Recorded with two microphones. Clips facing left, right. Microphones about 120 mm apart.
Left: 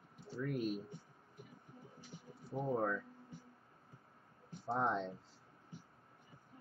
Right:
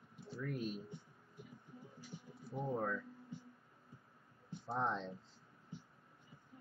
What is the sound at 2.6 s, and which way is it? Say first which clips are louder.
Speech: left 3 dB; 15° left (ahead or behind).